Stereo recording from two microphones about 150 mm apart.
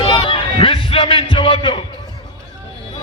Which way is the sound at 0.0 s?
35° left (ahead or behind).